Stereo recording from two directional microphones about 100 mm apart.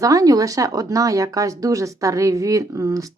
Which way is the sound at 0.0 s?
35° right (ahead or behind).